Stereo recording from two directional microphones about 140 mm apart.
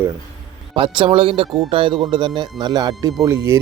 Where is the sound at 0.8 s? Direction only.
40° right (ahead or behind).